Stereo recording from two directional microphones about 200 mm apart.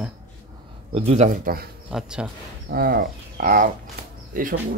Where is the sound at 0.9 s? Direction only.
30° right (ahead or behind).